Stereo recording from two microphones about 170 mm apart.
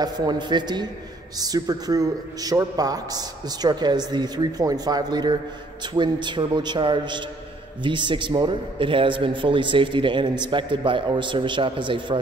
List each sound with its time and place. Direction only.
0.0 s a man's voice: 25° right (ahead or behind)